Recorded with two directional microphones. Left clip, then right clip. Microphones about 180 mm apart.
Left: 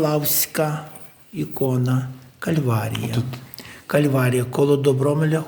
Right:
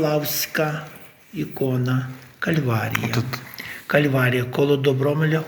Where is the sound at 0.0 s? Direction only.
65° left (ahead or behind).